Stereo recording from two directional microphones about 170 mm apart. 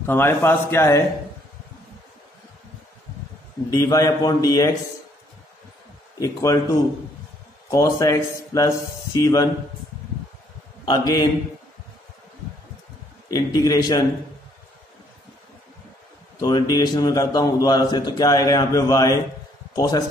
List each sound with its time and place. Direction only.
0.0 s a man's voice: 15° left (ahead or behind)
3.7 s a man's voice: 20° left (ahead or behind)
6.1 s a man's voice: 20° left (ahead or behind)
7.7 s a man's voice: 20° left (ahead or behind)
10.9 s a man's voice: 25° left (ahead or behind)
13.3 s a man's voice: 20° left (ahead or behind)
16.3 s a man's voice: 25° left (ahead or behind)